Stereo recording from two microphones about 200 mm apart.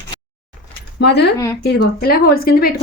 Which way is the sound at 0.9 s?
55° left (ahead or behind).